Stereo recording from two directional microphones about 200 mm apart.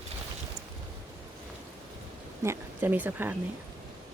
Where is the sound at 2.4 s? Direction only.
10° right (ahead or behind).